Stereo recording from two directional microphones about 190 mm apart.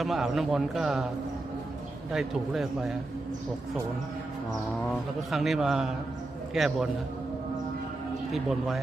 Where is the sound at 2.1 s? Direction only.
Centre (ahead or behind).